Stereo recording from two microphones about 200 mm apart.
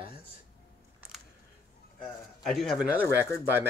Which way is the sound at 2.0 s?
Centre (ahead or behind).